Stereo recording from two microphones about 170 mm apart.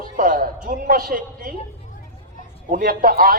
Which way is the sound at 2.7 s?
55° right (ahead or behind).